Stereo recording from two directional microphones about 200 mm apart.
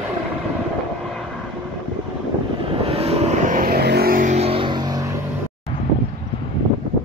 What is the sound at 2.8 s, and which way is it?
Vehicle, 30° right (ahead or behind).